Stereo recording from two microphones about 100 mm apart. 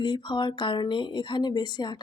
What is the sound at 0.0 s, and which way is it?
Speech, 50° left (ahead or behind).